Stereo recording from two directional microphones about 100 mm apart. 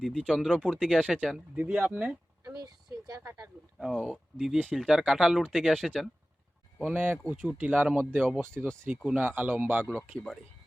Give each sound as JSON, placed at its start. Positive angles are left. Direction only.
{"t": 0.0, "sound": "speech", "side_deg": 5}
{"t": 1.5, "sound": "speech", "side_deg": -15}
{"t": 2.4, "sound": "a sound", "side_deg": -40}
{"t": 3.2, "sound": "speech", "side_deg": -30}
{"t": 3.8, "sound": "speech", "side_deg": -5}
{"t": 6.8, "sound": "a man's voice", "side_deg": -20}